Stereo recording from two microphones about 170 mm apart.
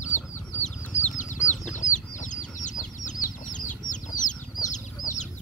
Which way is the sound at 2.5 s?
50° left (ahead or behind).